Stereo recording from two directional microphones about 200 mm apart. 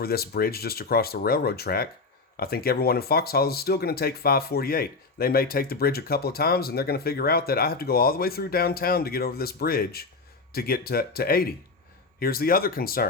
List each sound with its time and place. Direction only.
0.0 s speech: 50° left (ahead or behind)